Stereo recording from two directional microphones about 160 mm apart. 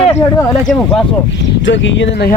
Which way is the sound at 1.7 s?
85° left.